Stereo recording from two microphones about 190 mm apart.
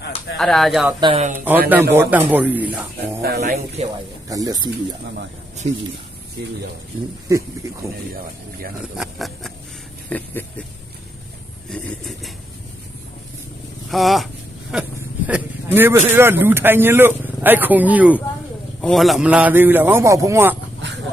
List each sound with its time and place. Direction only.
0.3 s speech: centre (ahead or behind)
0.9 s speech: 25° right (ahead or behind)
1.7 s speech: 10° right (ahead or behind)
3.2 s speech: 60° right (ahead or behind)
3.4 s speech: 40° right (ahead or behind)
4.3 s speech: 20° right (ahead or behind)
5.6 s speech: 35° right (ahead or behind)
7.3 s speech: 15° right (ahead or behind)
8.8 s speech: centre (ahead or behind)
10.1 s a sound: 10° left (ahead or behind)
11.7 s speech: centre (ahead or behind)
13.9 s speech: centre (ahead or behind)